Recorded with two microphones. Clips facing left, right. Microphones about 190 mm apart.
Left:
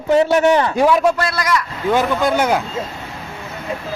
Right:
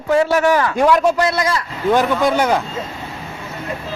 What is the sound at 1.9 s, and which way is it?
Speech, centre (ahead or behind).